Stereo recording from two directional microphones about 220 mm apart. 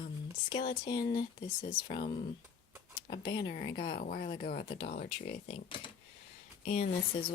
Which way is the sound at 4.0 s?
40° left (ahead or behind).